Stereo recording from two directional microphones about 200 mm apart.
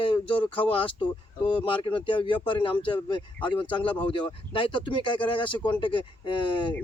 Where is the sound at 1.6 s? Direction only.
25° left (ahead or behind).